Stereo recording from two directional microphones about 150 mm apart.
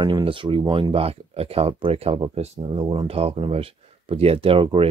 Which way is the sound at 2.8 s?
25° right (ahead or behind).